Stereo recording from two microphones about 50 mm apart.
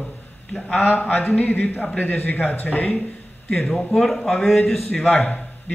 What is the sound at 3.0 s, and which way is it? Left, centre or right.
A man's voice, centre.